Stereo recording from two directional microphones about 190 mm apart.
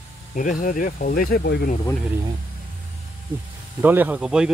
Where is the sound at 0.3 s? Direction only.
45° left (ahead or behind).